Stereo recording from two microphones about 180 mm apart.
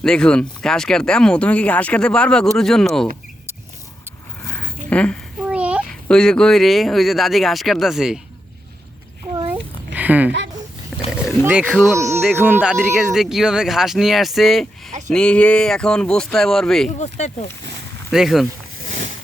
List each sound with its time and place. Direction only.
0.0 s speech: 5° left (ahead or behind)
4.4 s zipper: 10° left (ahead or behind)
4.9 s speech: 5° left (ahead or behind)
5.5 s a sound: 5° right (ahead or behind)
5.9 s speech: 5° left (ahead or behind)
9.5 s a sound: 10° right (ahead or behind)
11.3 s speech: 5° right (ahead or behind)
11.9 s speech: 15° right (ahead or behind)
12.2 s speech: 5° right (ahead or behind)
17.0 s speech: 40° left (ahead or behind)
18.1 s speech: centre (ahead or behind)
18.9 s a sound: 45° right (ahead or behind)